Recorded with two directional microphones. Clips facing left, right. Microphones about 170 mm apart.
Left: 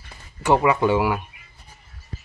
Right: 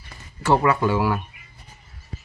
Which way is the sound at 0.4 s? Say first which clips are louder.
Left 1 dB; 15° left (ahead or behind).